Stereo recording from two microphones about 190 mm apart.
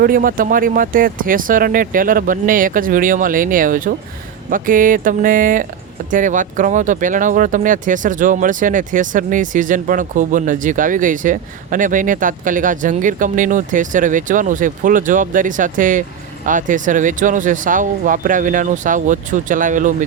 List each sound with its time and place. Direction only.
0.0 s speech: 50° right (ahead or behind)